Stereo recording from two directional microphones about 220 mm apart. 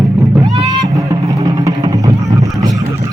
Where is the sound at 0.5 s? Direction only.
20° right (ahead or behind).